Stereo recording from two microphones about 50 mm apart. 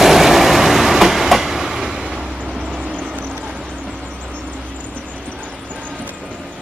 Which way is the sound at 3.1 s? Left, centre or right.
Right.